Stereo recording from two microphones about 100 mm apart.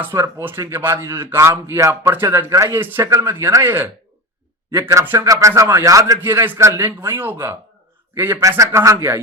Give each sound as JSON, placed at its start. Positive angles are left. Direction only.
{"t": 0.0, "sound": "speech", "side_deg": -25}
{"t": 6.1, "sound": "speech", "side_deg": -20}